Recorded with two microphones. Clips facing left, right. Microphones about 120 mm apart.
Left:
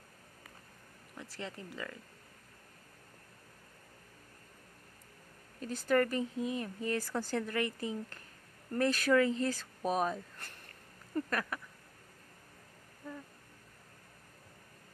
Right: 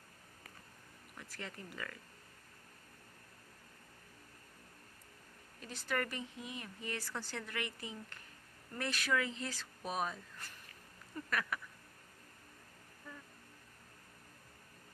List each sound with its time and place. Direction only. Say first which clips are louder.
1.2 s speech: left 4 dB; 25° left (ahead or behind)
5.6 s speech: left 9 dB; 40° left (ahead or behind)
11.2 s speech: left 2 dB; 35° left (ahead or behind)